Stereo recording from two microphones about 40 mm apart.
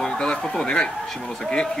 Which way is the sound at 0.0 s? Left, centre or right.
Centre.